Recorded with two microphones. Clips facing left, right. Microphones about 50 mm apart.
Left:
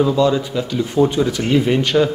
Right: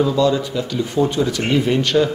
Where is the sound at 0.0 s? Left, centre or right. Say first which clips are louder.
Left 1 dB; centre.